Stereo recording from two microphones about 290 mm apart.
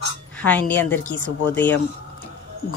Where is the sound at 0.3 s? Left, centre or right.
Centre.